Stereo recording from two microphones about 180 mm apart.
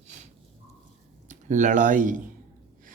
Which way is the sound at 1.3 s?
45° right (ahead or behind).